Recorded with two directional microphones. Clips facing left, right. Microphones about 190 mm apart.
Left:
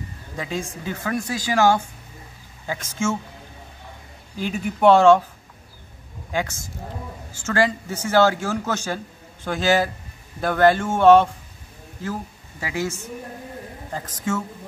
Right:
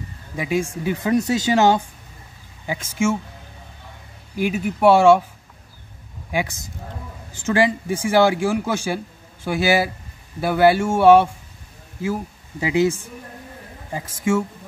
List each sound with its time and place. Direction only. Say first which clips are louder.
0.4 s a man's voice: right 6 dB; 10° right (ahead or behind)
4.4 s a man's voice: right 2 dB; 5° right (ahead or behind)
6.3 s a man's voice: right 2 dB; 15° right (ahead or behind)